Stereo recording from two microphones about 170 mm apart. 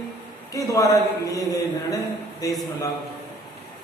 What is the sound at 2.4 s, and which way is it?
Speech, 20° left (ahead or behind).